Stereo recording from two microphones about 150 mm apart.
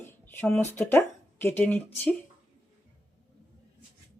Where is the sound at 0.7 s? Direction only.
15° left (ahead or behind).